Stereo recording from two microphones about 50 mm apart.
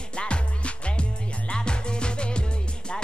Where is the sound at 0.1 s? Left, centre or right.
Left.